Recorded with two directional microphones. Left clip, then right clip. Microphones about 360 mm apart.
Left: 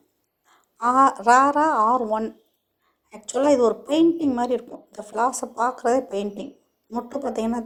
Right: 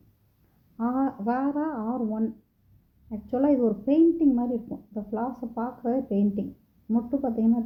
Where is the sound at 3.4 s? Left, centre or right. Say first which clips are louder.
Left 6 dB; centre.